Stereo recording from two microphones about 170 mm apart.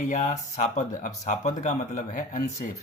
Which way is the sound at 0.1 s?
45° left (ahead or behind).